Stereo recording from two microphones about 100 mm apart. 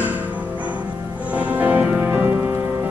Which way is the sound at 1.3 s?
15° right (ahead or behind).